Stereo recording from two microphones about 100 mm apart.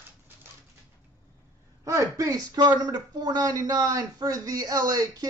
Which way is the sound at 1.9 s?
35° right (ahead or behind).